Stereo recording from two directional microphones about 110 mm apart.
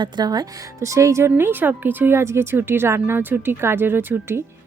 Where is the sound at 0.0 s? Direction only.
40° right (ahead or behind); by 4.4 s 20° right (ahead or behind).